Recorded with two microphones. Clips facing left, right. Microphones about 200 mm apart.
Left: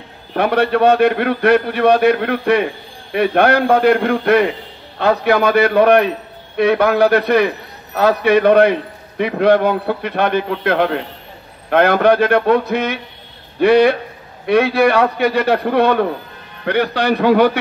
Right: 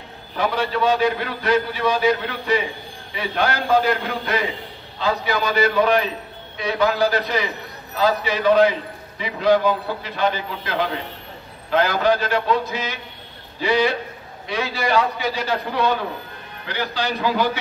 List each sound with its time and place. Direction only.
0.3 s a man's voice: 60° left (ahead or behind)